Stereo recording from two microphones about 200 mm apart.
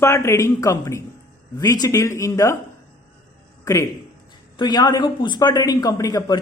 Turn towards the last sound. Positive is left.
turn(degrees=15)  # may be behind; listen again after turning